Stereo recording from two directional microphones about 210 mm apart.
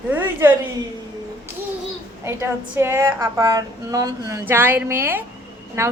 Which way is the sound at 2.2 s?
10° right (ahead or behind).